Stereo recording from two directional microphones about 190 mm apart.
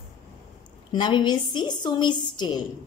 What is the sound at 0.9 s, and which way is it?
A woman's voice, 25° left (ahead or behind).